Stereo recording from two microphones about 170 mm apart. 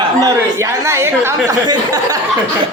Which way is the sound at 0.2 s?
20° right (ahead or behind).